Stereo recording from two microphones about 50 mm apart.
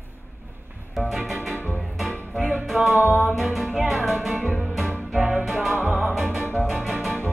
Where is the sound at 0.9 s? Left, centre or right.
Centre.